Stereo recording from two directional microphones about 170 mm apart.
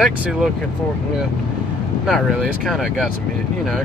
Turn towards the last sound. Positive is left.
turn(degrees=0)  # may be behind; listen again after turning